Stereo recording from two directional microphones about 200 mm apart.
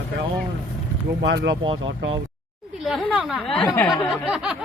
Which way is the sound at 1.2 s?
55° right (ahead or behind).